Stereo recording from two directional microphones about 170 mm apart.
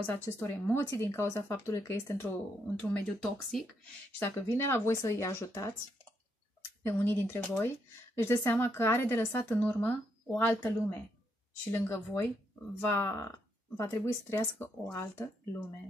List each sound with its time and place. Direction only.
0.0 s speech: 15° left (ahead or behind)